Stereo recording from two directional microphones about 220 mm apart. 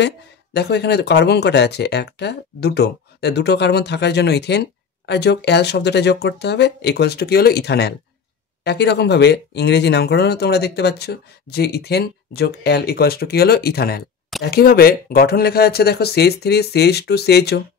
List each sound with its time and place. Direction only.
0.0 s speech: 50° left (ahead or behind)